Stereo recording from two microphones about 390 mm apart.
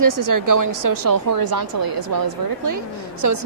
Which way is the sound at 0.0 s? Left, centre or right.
Right.